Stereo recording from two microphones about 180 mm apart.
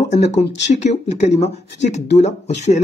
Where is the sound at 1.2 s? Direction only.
40° left (ahead or behind).